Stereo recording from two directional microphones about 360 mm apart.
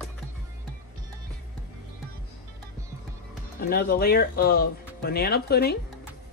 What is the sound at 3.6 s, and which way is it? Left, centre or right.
Speech, left.